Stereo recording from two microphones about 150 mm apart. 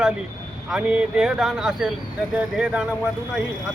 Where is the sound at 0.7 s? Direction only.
5° right (ahead or behind).